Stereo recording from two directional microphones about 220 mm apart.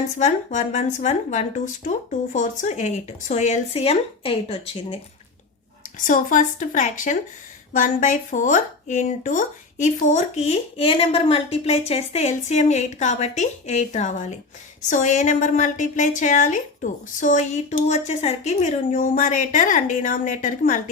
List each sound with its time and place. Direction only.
0.2 s speech: 30° left (ahead or behind)
6.1 s speech: 35° left (ahead or behind)